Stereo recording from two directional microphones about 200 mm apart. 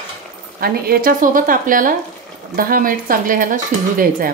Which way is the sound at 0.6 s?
45° right (ahead or behind).